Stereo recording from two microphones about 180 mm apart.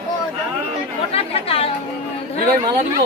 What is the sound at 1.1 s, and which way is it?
Speech, 35° left (ahead or behind).